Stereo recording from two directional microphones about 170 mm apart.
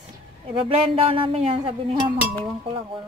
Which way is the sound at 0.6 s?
30° right (ahead or behind).